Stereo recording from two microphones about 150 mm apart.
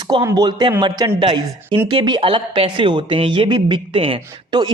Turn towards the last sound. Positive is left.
turn(degrees=-35)  # may be behind; listen again after turning